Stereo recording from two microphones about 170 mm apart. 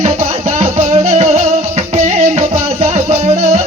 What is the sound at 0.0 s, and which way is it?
Music, 45° right (ahead or behind).